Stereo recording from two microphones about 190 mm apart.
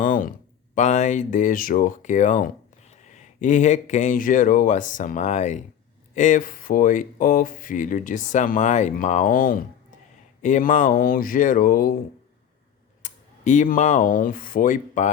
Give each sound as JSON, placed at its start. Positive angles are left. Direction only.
{"t": 0.0, "sound": "a sound", "side_deg": 45}
{"t": 0.8, "sound": "speech", "side_deg": 40}
{"t": 13.0, "sound": "speech", "side_deg": 40}